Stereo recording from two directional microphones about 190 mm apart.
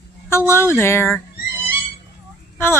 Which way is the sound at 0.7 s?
15° left (ahead or behind).